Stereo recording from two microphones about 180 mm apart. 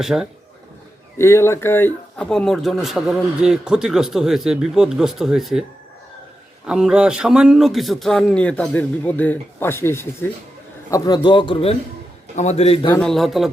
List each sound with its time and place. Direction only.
0.0 s speech: 5° right (ahead or behind)
1.2 s speech: 15° left (ahead or behind); by 5.6 s centre (ahead or behind)
6.7 s a man's voice: 5° right (ahead or behind); by 12.9 s 30° left (ahead or behind)
12.9 s speech: 5° left (ahead or behind)